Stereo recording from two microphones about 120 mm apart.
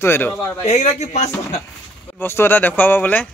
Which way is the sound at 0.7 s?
65° left (ahead or behind).